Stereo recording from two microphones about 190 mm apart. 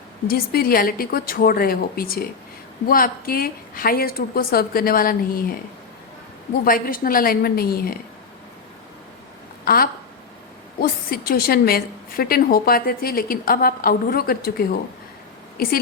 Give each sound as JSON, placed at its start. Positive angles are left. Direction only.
{"t": 0.3, "sound": "a woman's voice", "side_deg": 50}
{"t": 6.7, "sound": "a woman's voice", "side_deg": 50}
{"t": 9.6, "sound": "a woman's voice", "side_deg": 50}